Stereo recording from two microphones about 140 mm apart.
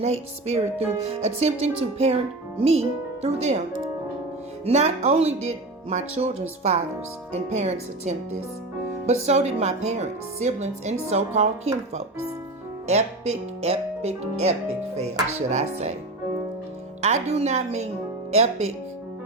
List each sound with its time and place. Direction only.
0.0 s speech: 50° right (ahead or behind)
4.6 s speech: 50° right (ahead or behind)
17.0 s speech: 50° right (ahead or behind)